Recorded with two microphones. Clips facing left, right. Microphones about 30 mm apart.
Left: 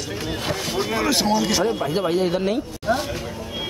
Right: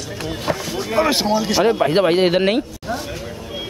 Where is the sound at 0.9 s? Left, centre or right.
Centre.